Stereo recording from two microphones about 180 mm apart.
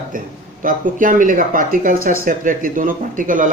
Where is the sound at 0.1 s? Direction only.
50° right (ahead or behind).